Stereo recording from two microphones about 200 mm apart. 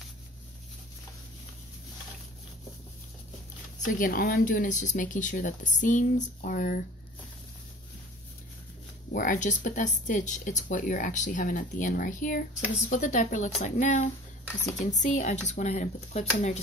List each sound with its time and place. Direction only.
3.8 s speech: 45° left (ahead or behind)
9.1 s speech: 40° left (ahead or behind)